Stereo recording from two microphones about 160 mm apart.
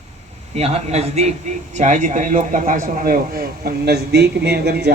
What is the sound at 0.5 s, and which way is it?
A man's voice, 40° right (ahead or behind).